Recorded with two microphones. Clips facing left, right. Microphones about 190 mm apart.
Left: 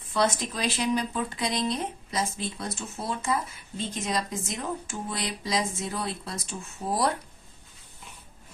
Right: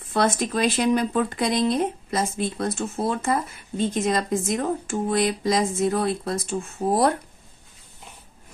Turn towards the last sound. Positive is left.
turn(degrees=-55)  # may be behind; listen again after turning